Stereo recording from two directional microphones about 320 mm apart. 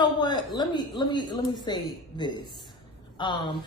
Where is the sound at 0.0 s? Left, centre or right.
Centre.